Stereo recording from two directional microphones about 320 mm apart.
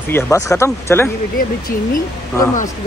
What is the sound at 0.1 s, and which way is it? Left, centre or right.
Speech, centre.